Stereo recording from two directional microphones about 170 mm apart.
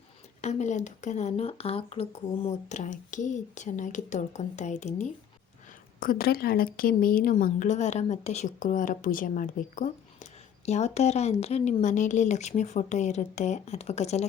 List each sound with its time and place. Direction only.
0.4 s speech: 45° left (ahead or behind)
6.0 s speech: 60° left (ahead or behind); by 14.3 s 40° left (ahead or behind)